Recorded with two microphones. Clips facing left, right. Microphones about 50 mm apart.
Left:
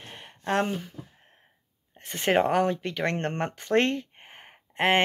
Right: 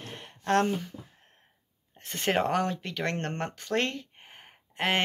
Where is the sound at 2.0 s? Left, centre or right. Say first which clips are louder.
Left 4 dB; centre.